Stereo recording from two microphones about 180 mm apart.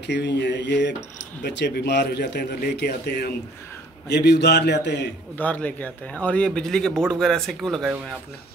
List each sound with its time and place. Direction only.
0.0 s speech: 75° left (ahead or behind)
5.4 s a man's voice: 10° left (ahead or behind)